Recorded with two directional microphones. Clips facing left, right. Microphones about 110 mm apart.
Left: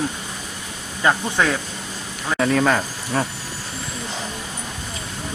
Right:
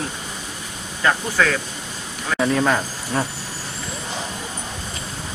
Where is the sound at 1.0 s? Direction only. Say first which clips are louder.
Even; 20° left (ahead or behind).